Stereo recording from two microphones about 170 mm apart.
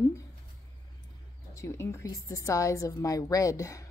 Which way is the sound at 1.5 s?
15° left (ahead or behind).